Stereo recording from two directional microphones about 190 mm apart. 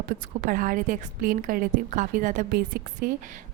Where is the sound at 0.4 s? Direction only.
45° right (ahead or behind).